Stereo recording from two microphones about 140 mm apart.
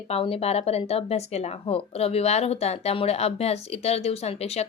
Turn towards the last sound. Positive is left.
turn(degrees=45)  # may be behind; listen again after turning